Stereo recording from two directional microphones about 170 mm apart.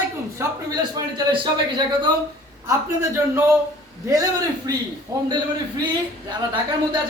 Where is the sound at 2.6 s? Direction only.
15° right (ahead or behind).